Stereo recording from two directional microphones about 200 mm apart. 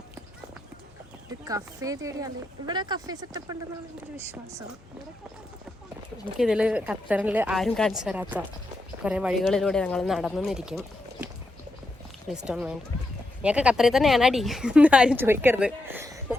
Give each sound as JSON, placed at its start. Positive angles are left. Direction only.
{"t": 1.5, "sound": "speech", "side_deg": -15}
{"t": 6.4, "sound": "speech", "side_deg": -5}
{"t": 12.5, "sound": "speech", "side_deg": -5}